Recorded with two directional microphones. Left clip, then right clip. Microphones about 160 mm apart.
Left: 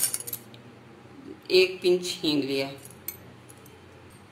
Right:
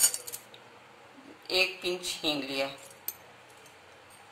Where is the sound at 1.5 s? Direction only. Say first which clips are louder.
Left 7 dB; 60° right (ahead or behind).